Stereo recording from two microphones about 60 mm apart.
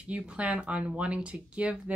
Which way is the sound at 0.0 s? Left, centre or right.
Right.